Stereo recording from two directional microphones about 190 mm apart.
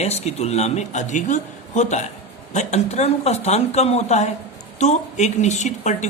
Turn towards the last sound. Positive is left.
turn(degrees=40)  # may be behind; listen again after turning